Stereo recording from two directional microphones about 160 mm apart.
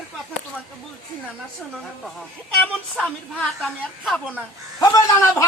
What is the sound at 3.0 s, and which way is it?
A woman's voice, 5° left (ahead or behind).